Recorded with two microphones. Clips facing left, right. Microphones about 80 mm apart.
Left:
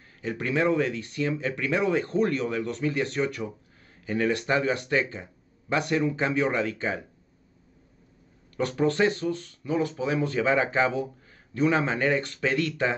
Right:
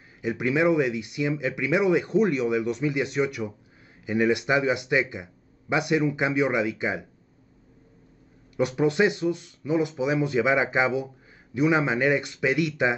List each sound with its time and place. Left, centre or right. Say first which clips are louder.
0.2 s speech: right 3 dB; centre
8.5 s speech: right 2 dB; centre